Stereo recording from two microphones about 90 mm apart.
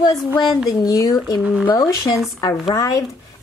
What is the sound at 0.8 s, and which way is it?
Speech, 45° left (ahead or behind).